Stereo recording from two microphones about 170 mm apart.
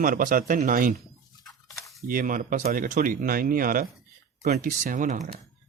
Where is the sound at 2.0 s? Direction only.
55° right (ahead or behind).